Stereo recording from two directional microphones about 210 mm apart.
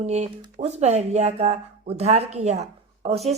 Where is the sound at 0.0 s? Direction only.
30° right (ahead or behind).